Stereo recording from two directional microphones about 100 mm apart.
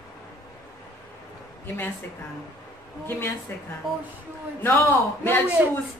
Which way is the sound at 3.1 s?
25° left (ahead or behind).